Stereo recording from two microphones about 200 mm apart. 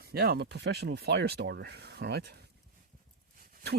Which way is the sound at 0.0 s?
50° right (ahead or behind).